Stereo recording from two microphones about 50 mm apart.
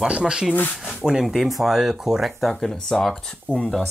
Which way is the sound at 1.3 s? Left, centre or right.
Centre.